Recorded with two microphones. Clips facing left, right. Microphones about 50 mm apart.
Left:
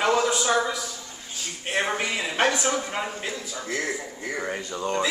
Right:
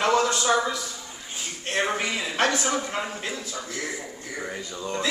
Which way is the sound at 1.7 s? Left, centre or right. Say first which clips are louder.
Even; centre.